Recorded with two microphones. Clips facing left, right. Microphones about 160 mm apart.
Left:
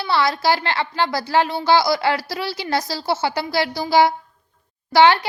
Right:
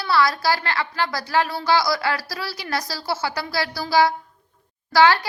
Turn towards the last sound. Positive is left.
turn(degrees=25)  # may be behind; listen again after turning